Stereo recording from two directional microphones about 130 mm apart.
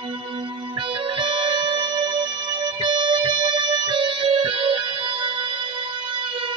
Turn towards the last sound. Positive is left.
turn(degrees=-40)  # may be behind; listen again after turning